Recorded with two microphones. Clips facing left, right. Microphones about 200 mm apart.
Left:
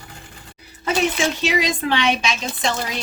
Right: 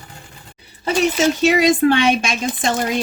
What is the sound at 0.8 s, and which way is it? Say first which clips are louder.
Speech: right 4 dB; 45° right (ahead or behind).